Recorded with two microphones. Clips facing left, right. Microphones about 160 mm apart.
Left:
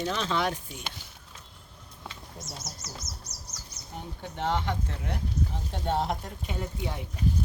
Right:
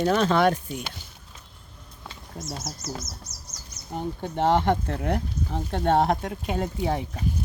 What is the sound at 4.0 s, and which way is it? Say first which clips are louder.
Speech: right 9 dB; 40° right (ahead or behind).